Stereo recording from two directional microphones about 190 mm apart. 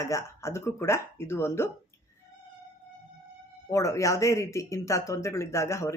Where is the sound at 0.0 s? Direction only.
15° left (ahead or behind).